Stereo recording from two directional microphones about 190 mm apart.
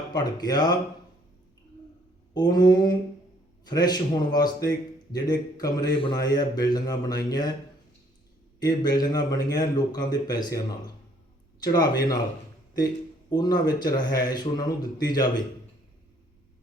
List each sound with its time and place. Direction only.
0.1 s a man's voice: 20° left (ahead or behind)
2.3 s a man's voice: 20° left (ahead or behind)
8.6 s a man's voice: 20° left (ahead or behind)
11.6 s a man's voice: 20° left (ahead or behind)
13.3 s a man's voice: 20° left (ahead or behind)